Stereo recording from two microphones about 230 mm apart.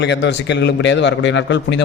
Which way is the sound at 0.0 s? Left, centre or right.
Left.